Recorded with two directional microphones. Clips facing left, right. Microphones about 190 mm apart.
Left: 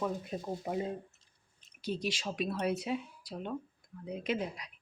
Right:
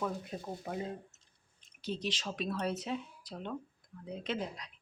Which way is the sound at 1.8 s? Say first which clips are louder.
Left 2 dB; 10° left (ahead or behind).